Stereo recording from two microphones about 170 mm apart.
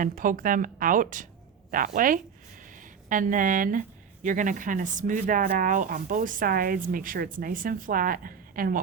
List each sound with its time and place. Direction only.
0.0 s speech: 50° right (ahead or behind)